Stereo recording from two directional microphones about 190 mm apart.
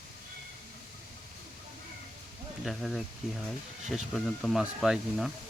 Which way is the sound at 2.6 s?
Centre (ahead or behind).